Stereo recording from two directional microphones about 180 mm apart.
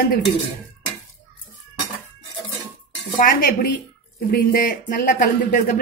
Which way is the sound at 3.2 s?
55° left (ahead or behind).